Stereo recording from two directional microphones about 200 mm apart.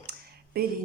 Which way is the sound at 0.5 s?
50° right (ahead or behind).